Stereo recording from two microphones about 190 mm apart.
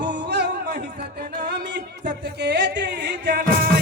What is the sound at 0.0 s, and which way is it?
Music, 60° right (ahead or behind).